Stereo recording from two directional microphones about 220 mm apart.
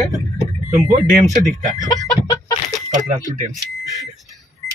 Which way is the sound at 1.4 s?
35° right (ahead or behind).